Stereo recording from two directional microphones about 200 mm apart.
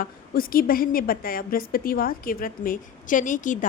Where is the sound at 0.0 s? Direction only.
45° left (ahead or behind).